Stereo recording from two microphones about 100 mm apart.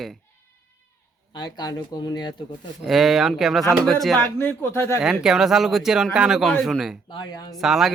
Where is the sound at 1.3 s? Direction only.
45° left (ahead or behind).